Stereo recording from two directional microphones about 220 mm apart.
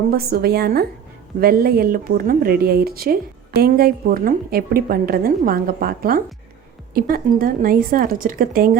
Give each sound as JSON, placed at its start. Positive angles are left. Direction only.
{"t": 0.1, "sound": "a woman's voice", "side_deg": -45}